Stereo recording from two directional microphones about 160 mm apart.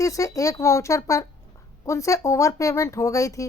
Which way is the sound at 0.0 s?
20° left (ahead or behind).